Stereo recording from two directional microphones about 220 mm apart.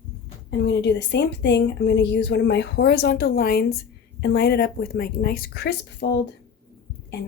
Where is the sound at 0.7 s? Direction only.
50° left (ahead or behind).